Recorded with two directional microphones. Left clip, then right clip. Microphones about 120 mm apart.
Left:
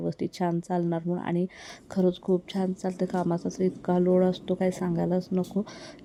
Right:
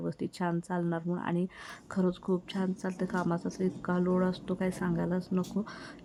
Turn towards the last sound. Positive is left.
turn(degrees=25)  # may be behind; listen again after turning